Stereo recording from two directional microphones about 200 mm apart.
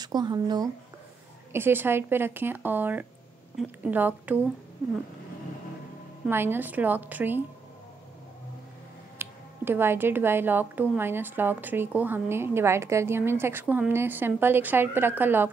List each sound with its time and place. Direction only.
0.0 s speech: 20° right (ahead or behind)
6.2 s speech: 10° right (ahead or behind)
9.2 s speech: 10° right (ahead or behind)